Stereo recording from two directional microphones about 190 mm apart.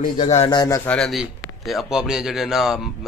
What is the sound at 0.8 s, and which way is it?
A man's voice, 5° left (ahead or behind).